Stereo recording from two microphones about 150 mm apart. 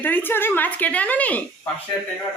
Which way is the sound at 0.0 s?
15° left (ahead or behind).